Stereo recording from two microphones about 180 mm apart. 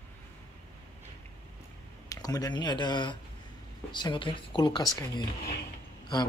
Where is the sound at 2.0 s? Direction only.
20° left (ahead or behind).